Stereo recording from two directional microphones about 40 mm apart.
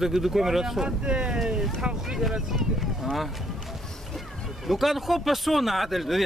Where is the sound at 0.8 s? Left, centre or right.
Right.